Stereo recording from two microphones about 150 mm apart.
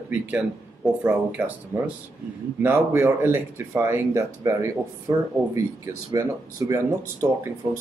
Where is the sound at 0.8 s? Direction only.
Centre (ahead or behind).